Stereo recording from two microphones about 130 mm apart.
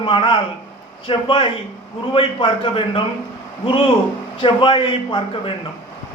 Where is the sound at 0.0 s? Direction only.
40° left (ahead or behind).